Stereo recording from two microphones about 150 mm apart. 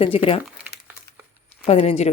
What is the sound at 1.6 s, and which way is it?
Speech, 40° left (ahead or behind).